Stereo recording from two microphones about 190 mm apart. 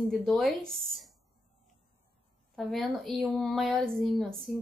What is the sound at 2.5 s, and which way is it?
A woman's voice, centre (ahead or behind).